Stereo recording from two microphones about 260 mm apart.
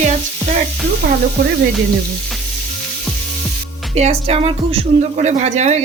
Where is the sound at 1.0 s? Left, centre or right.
Right.